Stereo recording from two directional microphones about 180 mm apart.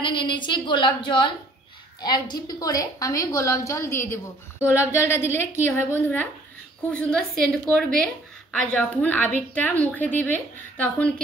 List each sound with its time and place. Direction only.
0.0 s a woman's voice: 25° left (ahead or behind); by 11.1 s 10° left (ahead or behind)